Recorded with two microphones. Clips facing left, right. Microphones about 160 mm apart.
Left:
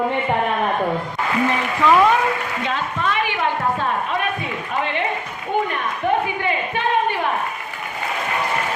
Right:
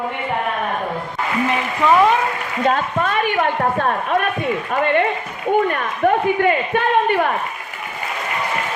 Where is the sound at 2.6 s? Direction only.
45° right (ahead or behind).